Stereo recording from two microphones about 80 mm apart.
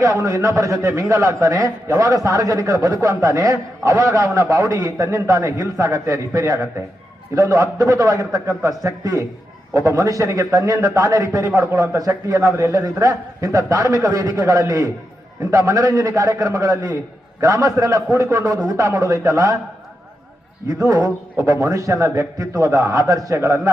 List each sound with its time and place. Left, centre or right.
0.0 s a man's voice: right
20.7 s a man's voice: right